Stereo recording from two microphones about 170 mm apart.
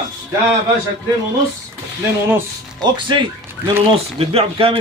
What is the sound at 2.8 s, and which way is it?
Speech, 30° right (ahead or behind).